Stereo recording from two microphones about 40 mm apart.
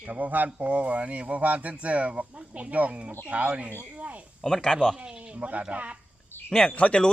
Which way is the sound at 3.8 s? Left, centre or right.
Right.